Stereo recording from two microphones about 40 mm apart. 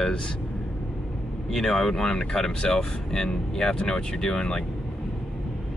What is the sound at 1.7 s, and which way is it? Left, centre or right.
Speech, centre.